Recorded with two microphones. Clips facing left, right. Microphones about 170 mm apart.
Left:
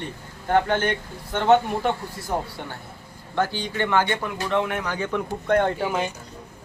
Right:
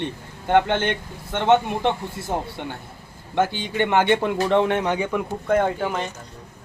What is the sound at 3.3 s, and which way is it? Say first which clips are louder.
Speech: right 3 dB; 20° right (ahead or behind).